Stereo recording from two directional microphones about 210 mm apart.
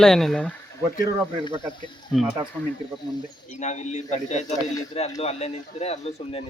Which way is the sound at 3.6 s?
35° left (ahead or behind).